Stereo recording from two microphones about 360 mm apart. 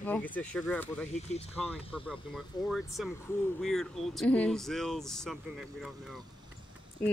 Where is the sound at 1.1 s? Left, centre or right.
Centre.